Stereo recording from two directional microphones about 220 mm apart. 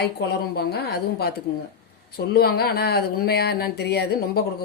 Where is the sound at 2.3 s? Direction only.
45° left (ahead or behind).